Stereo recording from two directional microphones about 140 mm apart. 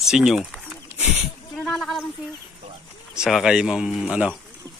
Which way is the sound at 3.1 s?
5° right (ahead or behind).